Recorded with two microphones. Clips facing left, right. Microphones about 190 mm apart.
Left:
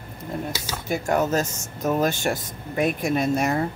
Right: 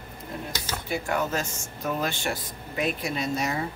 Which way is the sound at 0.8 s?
45° left (ahead or behind).